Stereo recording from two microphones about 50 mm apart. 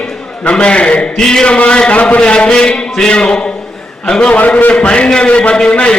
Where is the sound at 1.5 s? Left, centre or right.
Left.